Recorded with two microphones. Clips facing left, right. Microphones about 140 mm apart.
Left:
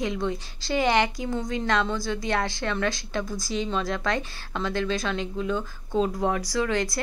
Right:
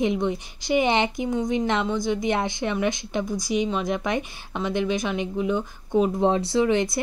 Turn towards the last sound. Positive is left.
turn(degrees=-20)  # may be behind; listen again after turning